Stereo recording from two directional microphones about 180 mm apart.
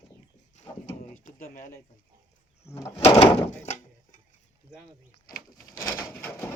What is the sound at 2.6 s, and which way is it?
Speech, 15° left (ahead or behind).